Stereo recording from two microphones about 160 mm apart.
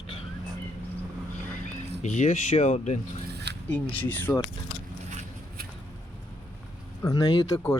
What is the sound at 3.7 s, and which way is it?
Speech, 10° left (ahead or behind).